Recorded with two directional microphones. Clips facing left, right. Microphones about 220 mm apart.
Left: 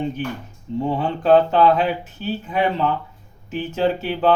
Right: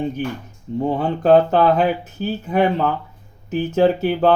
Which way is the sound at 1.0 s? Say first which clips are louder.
Right 1 dB; 40° right (ahead or behind).